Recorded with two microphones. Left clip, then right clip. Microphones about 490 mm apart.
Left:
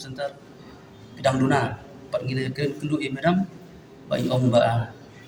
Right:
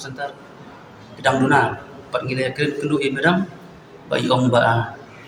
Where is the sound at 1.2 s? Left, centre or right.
Left.